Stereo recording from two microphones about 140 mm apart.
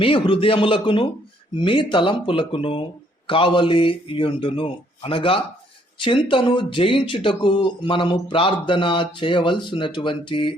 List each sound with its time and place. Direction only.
0.0 s speech: 40° left (ahead or behind)